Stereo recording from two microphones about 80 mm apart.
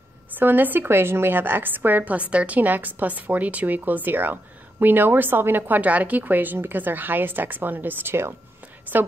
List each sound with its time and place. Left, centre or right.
0.4 s a woman's voice: right